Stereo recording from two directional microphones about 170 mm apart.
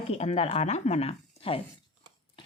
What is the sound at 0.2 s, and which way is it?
A woman's voice, 40° left (ahead or behind).